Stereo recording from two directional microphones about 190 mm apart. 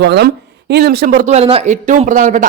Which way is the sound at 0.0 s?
65° right (ahead or behind).